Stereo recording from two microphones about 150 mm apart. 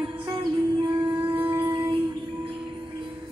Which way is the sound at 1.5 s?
20° right (ahead or behind).